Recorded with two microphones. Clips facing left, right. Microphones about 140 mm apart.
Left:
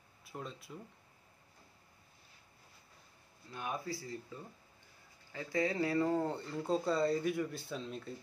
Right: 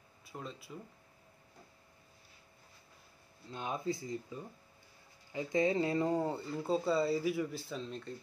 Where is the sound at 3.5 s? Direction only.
20° right (ahead or behind).